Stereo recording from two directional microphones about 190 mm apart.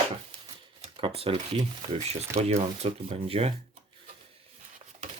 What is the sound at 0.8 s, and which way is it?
Speech, 30° right (ahead or behind).